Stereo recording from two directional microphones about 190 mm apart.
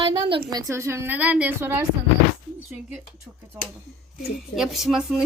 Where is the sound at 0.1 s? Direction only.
25° right (ahead or behind).